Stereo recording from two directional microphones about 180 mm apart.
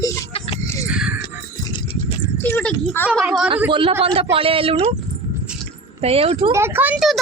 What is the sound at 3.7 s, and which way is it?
A man's voice, 30° right (ahead or behind).